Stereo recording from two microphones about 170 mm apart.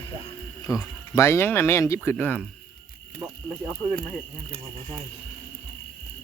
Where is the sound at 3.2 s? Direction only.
15° right (ahead or behind).